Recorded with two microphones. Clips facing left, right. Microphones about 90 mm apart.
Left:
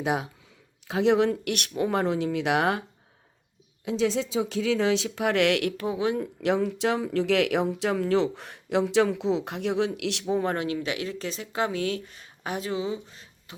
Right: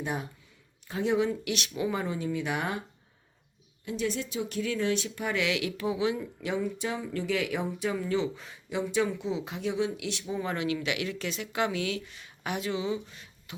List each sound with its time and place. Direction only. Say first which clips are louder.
0.0 s a woman's voice: left 6 dB; 90° left
3.8 s a woman's voice: left 6 dB; 90° left; by 6.2 s 50° left (ahead or behind)
6.4 s speech: left 7 dB; 80° left; by 10.8 s 45° left (ahead or behind)
10.8 s speech: left 2 dB; 35° left (ahead or behind)